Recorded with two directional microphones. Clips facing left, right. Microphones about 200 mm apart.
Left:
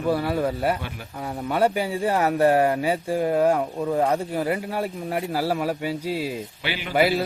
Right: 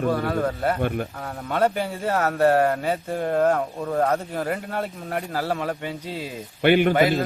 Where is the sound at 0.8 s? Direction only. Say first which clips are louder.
Right 11 dB; 55° right (ahead or behind).